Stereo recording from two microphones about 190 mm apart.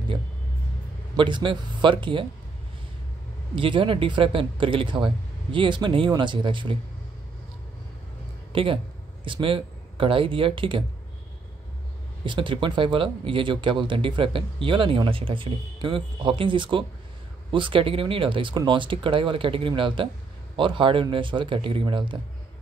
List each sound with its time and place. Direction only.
1.1 s speech: 25° right (ahead or behind)
3.5 s speech: 25° right (ahead or behind)
8.5 s speech: 30° right (ahead or behind)
12.3 s speech: 25° right (ahead or behind)